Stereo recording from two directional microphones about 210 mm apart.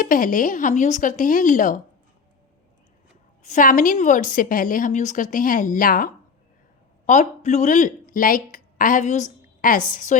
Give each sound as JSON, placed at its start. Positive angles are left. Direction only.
{"t": 0.0, "sound": "a woman's voice", "side_deg": 40}
{"t": 3.4, "sound": "a woman's voice", "side_deg": 35}